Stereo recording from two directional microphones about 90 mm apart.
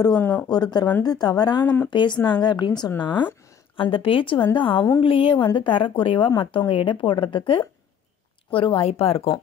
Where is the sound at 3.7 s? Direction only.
75° left (ahead or behind).